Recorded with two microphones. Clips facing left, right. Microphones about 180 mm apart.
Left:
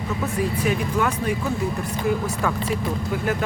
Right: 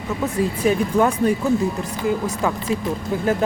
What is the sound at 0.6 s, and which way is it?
Speech, 35° right (ahead or behind).